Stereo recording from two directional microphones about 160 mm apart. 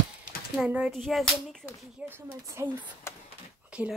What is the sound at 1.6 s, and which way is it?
Speech, 15° right (ahead or behind).